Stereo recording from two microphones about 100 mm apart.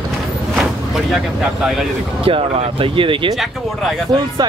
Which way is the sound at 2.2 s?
80° right.